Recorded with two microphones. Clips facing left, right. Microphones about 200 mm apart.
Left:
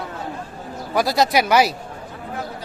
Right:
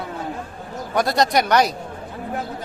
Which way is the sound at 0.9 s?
Centre (ahead or behind).